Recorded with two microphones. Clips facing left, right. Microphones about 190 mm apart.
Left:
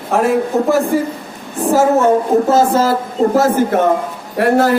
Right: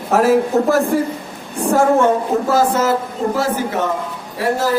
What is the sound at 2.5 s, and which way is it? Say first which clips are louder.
Speech: even; 25° left (ahead or behind).